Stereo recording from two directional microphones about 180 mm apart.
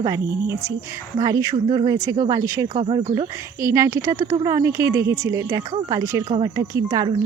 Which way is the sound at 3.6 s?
15° right (ahead or behind).